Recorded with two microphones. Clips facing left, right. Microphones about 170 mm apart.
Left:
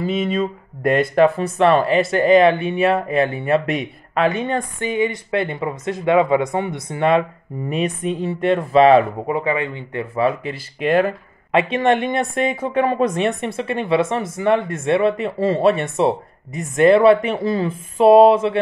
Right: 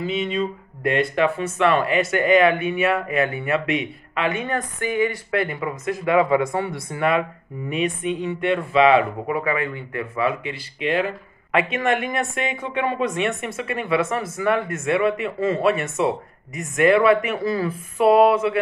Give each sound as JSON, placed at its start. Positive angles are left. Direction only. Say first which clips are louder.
{"t": 0.0, "sound": "speech", "louder": "left 3 dB", "side_deg": 45}
{"t": 7.7, "sound": "speech", "louder": "left 2 dB", "side_deg": 35}
{"t": 9.3, "sound": "speech", "louder": "left 3 dB", "side_deg": 25}
{"t": 11.5, "sound": "speech", "louder": "left 4 dB", "side_deg": 30}